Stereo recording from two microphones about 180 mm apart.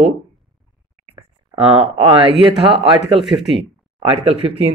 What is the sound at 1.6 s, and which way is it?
Speech, 35° right (ahead or behind).